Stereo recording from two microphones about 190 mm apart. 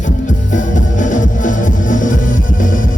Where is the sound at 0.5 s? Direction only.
40° left (ahead or behind).